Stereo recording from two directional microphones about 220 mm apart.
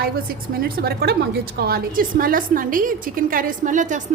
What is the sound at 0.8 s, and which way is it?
A woman's voice, 45° right (ahead or behind).